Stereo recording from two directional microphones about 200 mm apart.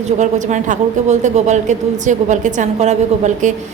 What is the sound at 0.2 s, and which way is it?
A woman's voice, 35° right (ahead or behind).